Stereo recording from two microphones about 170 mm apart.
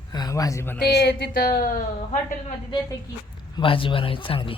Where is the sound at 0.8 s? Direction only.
75° left (ahead or behind); by 1.8 s 55° left (ahead or behind).